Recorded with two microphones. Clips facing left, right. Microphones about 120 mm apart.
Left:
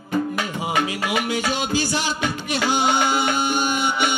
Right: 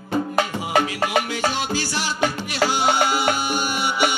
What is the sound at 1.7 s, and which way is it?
Music, 20° left (ahead or behind).